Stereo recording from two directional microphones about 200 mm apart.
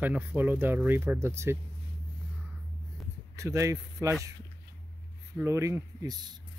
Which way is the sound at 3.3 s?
15° right (ahead or behind).